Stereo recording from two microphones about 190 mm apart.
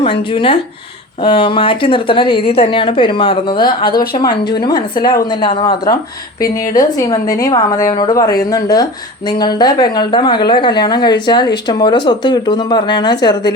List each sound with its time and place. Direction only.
0.0 s a woman's voice: 25° left (ahead or behind)